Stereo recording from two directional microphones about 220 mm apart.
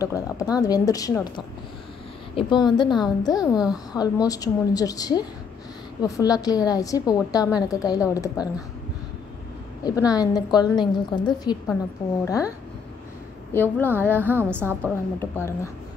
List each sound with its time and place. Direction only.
0.0 s a woman's voice: 15° left (ahead or behind)
9.8 s a woman's voice: 15° left (ahead or behind)
14.2 s a woman's voice: 10° right (ahead or behind)
14.8 s a woman's voice: 10° left (ahead or behind)